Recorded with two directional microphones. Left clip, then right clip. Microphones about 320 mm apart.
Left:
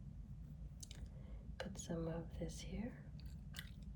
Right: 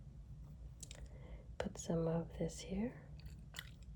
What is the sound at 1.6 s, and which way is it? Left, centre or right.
Speech, centre.